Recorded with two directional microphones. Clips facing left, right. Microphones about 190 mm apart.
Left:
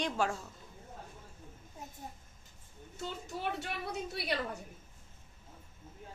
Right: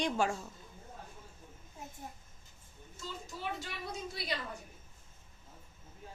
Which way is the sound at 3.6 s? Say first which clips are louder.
Left 3 dB; 65° left (ahead or behind).